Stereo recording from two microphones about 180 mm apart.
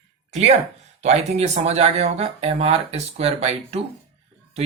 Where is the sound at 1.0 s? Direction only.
35° right (ahead or behind).